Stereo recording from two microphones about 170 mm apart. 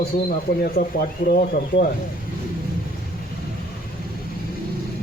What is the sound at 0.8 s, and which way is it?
Speech, 90° left.